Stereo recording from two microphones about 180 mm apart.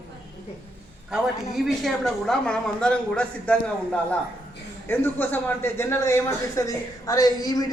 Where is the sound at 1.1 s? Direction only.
Centre (ahead or behind).